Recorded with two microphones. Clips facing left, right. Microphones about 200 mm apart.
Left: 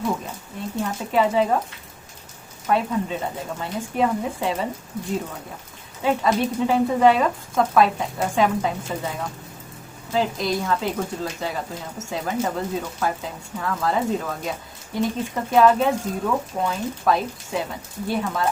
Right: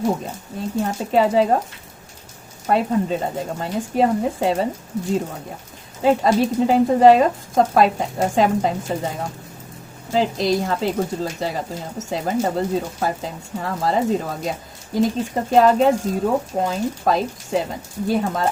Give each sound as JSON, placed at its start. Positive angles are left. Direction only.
{"t": 0.8, "sound": "speech", "side_deg": -40}
{"t": 2.6, "sound": "speech", "side_deg": -40}
{"t": 6.0, "sound": "speech", "side_deg": -40}